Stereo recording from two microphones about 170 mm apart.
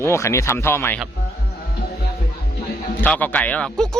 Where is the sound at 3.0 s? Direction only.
10° left (ahead or behind).